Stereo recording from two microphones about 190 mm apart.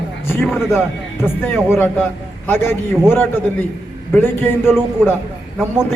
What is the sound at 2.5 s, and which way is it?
A man's voice, 10° left (ahead or behind).